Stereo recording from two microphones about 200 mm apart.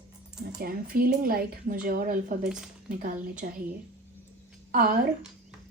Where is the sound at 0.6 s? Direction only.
45° right (ahead or behind).